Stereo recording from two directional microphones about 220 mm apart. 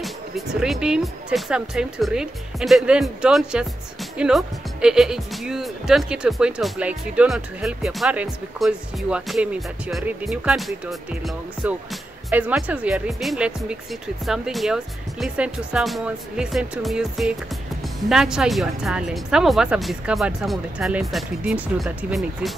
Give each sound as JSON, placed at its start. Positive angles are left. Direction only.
{"t": 0.0, "sound": "speech", "side_deg": 0}